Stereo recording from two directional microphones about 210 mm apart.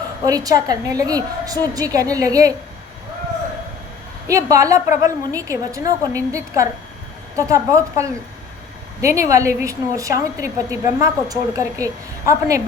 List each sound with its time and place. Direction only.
0.3 s a woman's voice: 15° right (ahead or behind)
4.3 s a woman's voice: 15° right (ahead or behind)